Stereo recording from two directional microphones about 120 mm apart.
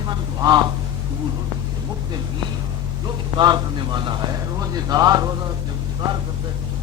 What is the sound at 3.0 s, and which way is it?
A man's voice, 35° right (ahead or behind).